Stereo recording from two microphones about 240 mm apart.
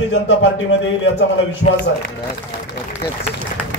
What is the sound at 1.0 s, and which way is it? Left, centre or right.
Speech, left.